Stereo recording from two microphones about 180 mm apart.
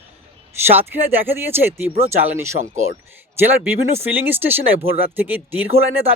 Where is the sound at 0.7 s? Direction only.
10° right (ahead or behind).